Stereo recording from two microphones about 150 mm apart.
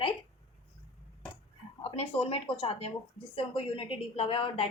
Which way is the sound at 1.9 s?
40° left (ahead or behind).